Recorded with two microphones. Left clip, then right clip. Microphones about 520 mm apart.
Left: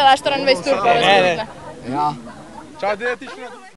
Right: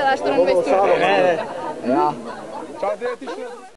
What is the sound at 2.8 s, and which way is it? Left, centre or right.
Speech, centre.